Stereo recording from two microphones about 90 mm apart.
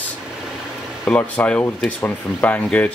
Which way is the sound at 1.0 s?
15° left (ahead or behind).